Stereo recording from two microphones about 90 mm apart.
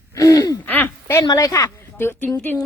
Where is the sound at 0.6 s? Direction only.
20° left (ahead or behind).